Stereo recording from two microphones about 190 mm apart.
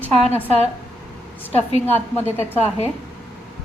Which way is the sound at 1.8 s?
10° left (ahead or behind).